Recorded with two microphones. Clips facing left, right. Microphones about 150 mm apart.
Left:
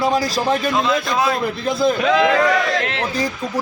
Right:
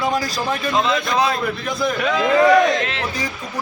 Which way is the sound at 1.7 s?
25° left (ahead or behind).